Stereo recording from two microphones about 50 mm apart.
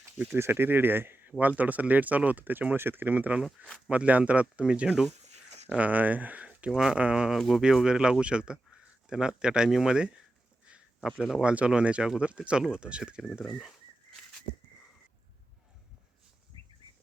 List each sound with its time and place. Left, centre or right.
0.3 s speech: right
1.3 s speech: right
4.6 s speech: centre
5.6 s speech: right
6.7 s speech: centre
7.3 s speech: centre
7.9 s speech: centre
11.0 s speech: centre
11.4 s speech: right